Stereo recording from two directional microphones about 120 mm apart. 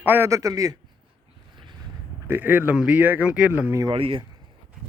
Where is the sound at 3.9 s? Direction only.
50° right (ahead or behind).